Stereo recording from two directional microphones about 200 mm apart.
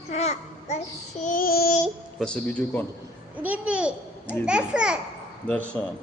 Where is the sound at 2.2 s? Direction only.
5° left (ahead or behind).